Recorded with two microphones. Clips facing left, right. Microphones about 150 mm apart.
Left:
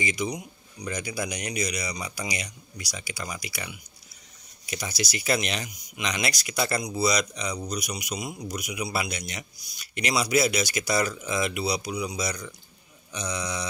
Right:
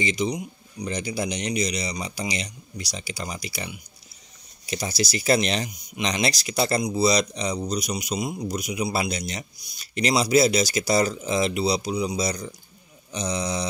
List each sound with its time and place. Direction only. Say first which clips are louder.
0.0 s speech: right 4 dB; 25° right (ahead or behind)
13.1 s mantra: right 5 dB; 30° right (ahead or behind)